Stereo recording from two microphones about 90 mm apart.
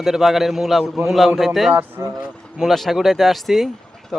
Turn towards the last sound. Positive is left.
turn(degrees=0)  # may be behind; listen again after turning